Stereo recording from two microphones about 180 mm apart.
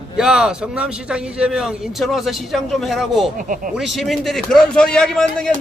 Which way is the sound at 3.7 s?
Centre (ahead or behind).